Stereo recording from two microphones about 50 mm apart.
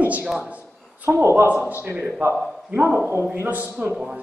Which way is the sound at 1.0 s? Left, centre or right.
Right.